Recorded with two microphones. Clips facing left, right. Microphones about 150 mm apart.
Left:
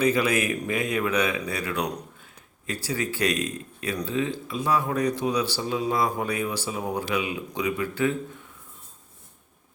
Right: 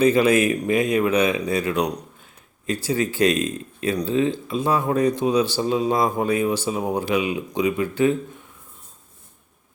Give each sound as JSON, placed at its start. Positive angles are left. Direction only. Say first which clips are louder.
{"t": 0.0, "sound": "speech", "louder": "right 6 dB", "side_deg": -25}